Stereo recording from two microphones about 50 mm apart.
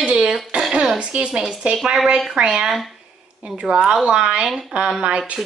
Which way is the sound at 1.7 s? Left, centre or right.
Centre.